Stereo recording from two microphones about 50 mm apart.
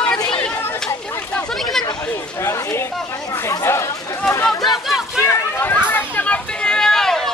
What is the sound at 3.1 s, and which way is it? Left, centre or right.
Chatter, left.